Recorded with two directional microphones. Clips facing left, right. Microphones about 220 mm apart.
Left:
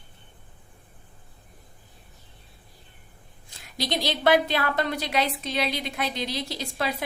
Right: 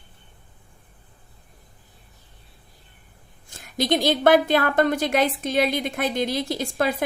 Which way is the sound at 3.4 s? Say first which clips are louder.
Right 8 dB; 50° right (ahead or behind).